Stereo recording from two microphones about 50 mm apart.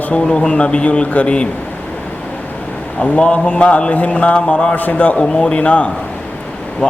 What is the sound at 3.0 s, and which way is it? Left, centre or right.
Speech, left.